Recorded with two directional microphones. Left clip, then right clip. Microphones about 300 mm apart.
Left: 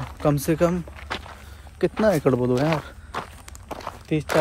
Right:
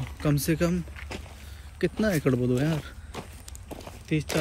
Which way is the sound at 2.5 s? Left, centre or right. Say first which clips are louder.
Left 6 dB; left.